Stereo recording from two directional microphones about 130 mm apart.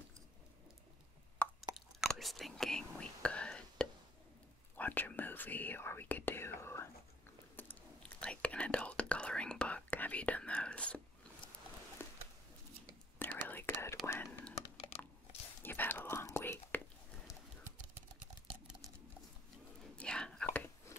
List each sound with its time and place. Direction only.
2.0 s whispering: centre (ahead or behind)
4.7 s speech: 15° left (ahead or behind)
7.5 s whispering: 10° left (ahead or behind)
12.0 s a sound: 15° left (ahead or behind)
13.5 s whispering: 15° left (ahead or behind)
14.5 s typing: 55° left (ahead or behind)
15.6 s whispering: 15° left (ahead or behind)
20.0 s whispering: 5° left (ahead or behind)